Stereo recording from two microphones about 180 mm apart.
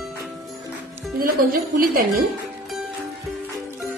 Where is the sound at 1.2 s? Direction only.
55° right (ahead or behind).